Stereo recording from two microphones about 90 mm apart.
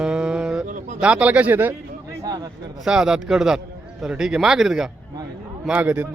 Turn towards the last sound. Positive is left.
turn(degrees=-20)  # may be behind; listen again after turning